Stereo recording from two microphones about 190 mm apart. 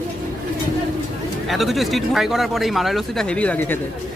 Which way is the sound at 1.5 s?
Centre (ahead or behind).